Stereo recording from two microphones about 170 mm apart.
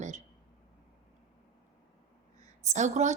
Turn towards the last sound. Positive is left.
turn(degrees=-45)  # may be behind; listen again after turning